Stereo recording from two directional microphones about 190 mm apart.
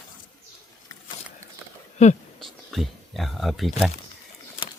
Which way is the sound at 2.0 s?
40° left (ahead or behind).